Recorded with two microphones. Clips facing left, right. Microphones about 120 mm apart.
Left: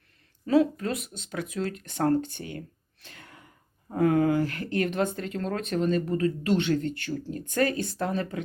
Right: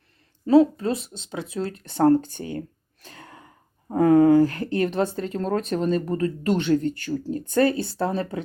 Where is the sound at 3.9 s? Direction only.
35° right (ahead or behind).